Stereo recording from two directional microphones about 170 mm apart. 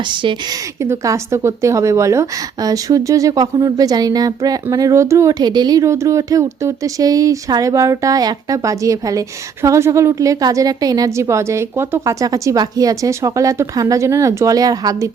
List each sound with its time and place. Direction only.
0.1 s a woman's voice: 30° right (ahead or behind)
0.8 s a woman's voice: 15° right (ahead or behind)